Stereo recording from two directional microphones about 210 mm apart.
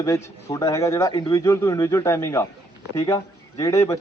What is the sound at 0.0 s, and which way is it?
Speech, 15° left (ahead or behind).